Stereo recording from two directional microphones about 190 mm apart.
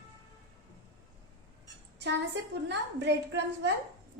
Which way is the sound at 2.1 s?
65° right (ahead or behind).